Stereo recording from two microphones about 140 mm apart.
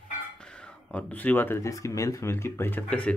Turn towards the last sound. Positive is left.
turn(degrees=10)  # may be behind; listen again after turning